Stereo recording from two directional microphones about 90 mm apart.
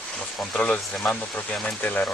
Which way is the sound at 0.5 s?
10° left (ahead or behind).